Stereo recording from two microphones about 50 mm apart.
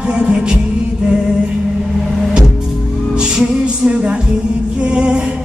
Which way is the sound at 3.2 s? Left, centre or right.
Centre.